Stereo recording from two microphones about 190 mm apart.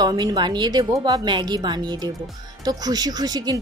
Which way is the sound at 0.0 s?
20° right (ahead or behind).